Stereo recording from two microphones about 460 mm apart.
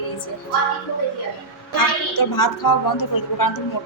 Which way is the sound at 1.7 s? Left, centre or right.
Left.